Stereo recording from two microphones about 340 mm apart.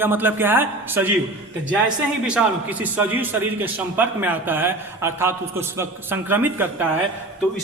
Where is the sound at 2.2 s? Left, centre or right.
Centre.